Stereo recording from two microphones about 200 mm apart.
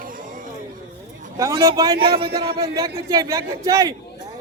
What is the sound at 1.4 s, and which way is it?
A man's voice, 20° right (ahead or behind).